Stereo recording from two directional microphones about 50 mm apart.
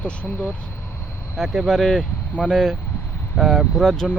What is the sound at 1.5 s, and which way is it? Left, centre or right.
Speech, centre.